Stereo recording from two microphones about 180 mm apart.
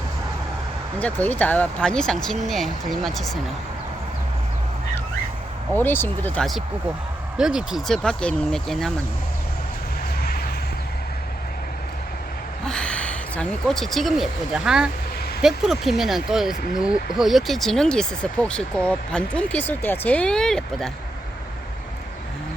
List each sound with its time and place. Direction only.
0.9 s speech: 10° left (ahead or behind)
5.7 s speech: 10° left (ahead or behind)
10.2 s vehicle: 60° left (ahead or behind)
12.6 s speech: 5° left (ahead or behind)